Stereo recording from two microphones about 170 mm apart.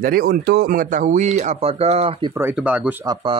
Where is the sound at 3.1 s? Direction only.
30° right (ahead or behind).